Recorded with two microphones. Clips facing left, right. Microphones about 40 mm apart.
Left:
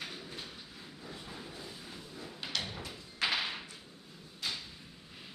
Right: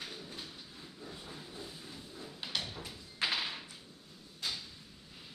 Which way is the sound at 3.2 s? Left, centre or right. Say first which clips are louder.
Left 2 dB; centre.